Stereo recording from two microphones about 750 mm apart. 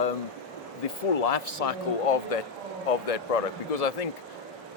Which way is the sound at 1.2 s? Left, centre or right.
Left.